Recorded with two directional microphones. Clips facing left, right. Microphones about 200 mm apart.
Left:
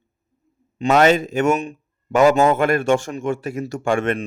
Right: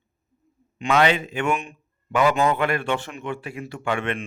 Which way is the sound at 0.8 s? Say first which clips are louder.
Left 5 dB; 45° left (ahead or behind).